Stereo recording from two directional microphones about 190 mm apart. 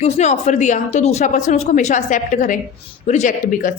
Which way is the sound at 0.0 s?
35° left (ahead or behind).